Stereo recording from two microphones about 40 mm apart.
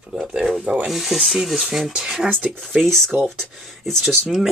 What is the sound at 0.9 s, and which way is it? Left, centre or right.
Speech, centre.